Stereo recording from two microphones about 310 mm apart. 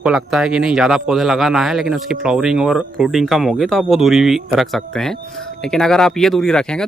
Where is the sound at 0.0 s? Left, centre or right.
Centre.